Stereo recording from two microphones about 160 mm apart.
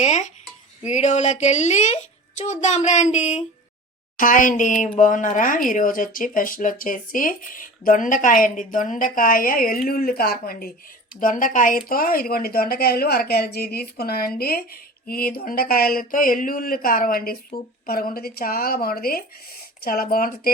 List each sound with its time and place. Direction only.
0.0 s a woman's voice: 45° left (ahead or behind)
4.2 s a woman's voice: 55° left (ahead or behind)
11.2 s a woman's voice: 55° left (ahead or behind)